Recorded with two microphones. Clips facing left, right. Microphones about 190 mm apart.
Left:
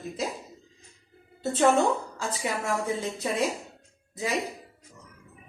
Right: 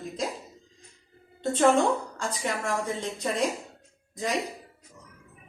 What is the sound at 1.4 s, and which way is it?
Speech, 5° left (ahead or behind).